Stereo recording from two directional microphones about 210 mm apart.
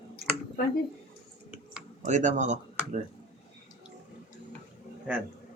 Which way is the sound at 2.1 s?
35° right (ahead or behind).